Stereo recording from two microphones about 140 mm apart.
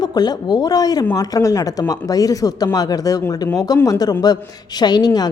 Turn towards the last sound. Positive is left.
turn(degrees=30)  # may be behind; listen again after turning